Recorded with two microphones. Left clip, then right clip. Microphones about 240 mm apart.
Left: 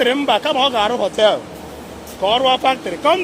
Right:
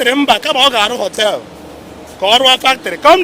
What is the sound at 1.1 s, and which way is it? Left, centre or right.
Speech, centre.